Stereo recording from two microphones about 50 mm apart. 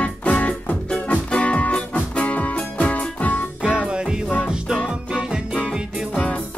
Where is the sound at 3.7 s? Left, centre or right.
Centre.